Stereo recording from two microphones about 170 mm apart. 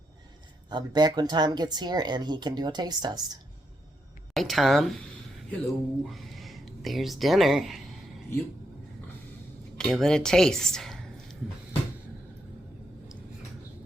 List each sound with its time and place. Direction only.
0.7 s speech: 25° right (ahead or behind)
4.4 s speech: centre (ahead or behind)
9.7 s speech: 5° left (ahead or behind)